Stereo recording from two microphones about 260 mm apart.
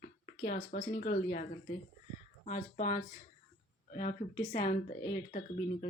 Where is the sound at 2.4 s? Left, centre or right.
Left.